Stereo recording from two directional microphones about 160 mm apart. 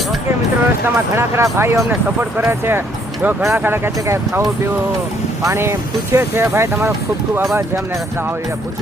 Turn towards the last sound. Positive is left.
turn(degrees=-15)  # may be behind; listen again after turning